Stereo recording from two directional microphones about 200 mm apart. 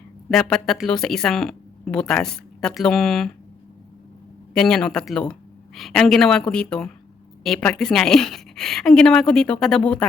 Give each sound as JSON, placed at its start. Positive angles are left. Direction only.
{"t": 0.3, "sound": "speech", "side_deg": 0}
{"t": 4.5, "sound": "speech", "side_deg": 5}